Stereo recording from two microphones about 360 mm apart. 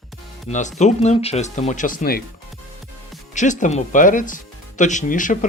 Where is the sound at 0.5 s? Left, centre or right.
Centre.